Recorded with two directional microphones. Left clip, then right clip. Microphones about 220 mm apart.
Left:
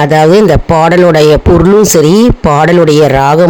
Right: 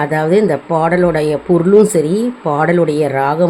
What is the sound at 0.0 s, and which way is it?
Speech, 45° left (ahead or behind).